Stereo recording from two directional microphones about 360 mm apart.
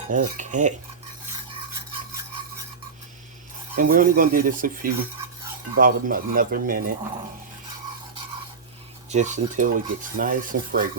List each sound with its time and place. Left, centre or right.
0.1 s filing: right
3.8 s filing: right
9.0 s filing: centre